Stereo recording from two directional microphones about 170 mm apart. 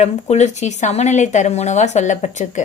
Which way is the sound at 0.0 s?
40° left (ahead or behind).